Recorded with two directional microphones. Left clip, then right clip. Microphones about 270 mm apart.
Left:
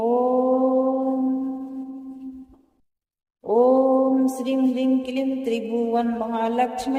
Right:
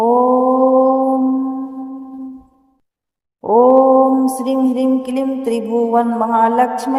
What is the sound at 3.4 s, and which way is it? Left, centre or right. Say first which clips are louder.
Mantra: right 7 dB; right.